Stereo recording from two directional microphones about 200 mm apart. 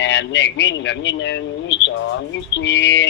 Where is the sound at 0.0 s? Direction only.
60° left (ahead or behind).